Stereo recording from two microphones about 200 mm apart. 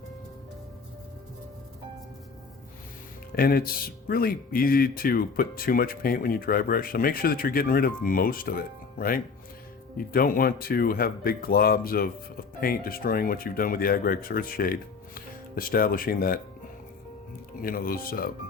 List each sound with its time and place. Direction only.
3.3 s speech: 45° left (ahead or behind)
17.6 s speech: 45° left (ahead or behind)